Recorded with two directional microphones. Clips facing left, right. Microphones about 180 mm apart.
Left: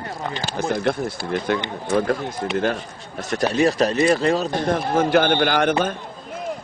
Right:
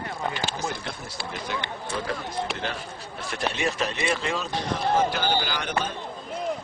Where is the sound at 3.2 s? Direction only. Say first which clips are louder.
Left 9 dB; 40° left (ahead or behind).